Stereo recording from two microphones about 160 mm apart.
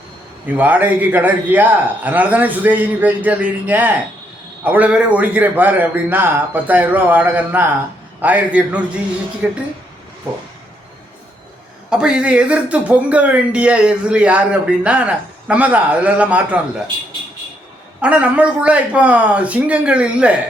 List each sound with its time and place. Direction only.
0.4 s a man's voice: 10° right (ahead or behind)
11.9 s a man's voice: 5° right (ahead or behind)
18.0 s a man's voice: 10° right (ahead or behind)